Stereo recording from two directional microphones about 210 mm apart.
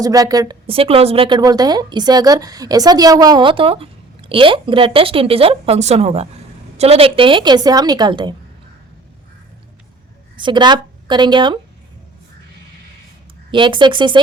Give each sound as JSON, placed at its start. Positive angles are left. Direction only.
{"t": 0.0, "sound": "a woman's voice", "side_deg": -15}
{"t": 10.3, "sound": "a woman's voice", "side_deg": -20}
{"t": 13.5, "sound": "a woman's voice", "side_deg": -25}